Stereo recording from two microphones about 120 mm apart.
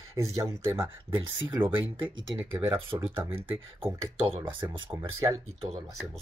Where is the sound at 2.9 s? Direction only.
30° right (ahead or behind).